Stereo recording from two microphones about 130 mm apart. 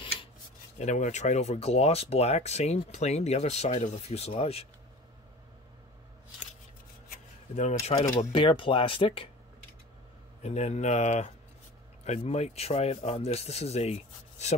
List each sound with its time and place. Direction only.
0.7 s speech: 65° left (ahead or behind)
7.5 s speech: 60° left (ahead or behind)
8.2 s speech: 40° left (ahead or behind)
10.4 s speech: 55° left (ahead or behind)